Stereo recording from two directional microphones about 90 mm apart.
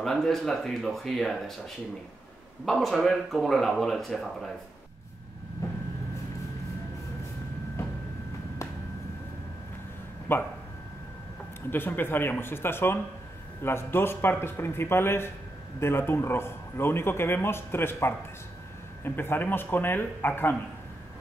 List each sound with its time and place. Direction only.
0.0 s speech: 5° left (ahead or behind)
2.6 s speech: centre (ahead or behind)
10.3 s a man's voice: 25° left (ahead or behind)
11.7 s a man's voice: 25° left (ahead or behind)